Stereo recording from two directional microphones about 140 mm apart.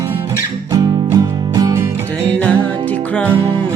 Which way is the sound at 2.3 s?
10° left (ahead or behind).